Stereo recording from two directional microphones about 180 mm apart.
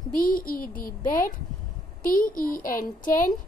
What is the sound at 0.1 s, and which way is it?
A child's voice, 50° left (ahead or behind).